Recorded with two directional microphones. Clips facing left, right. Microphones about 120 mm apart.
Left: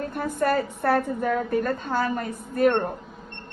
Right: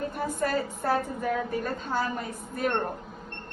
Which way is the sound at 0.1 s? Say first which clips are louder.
Left 4 dB; 55° left (ahead or behind).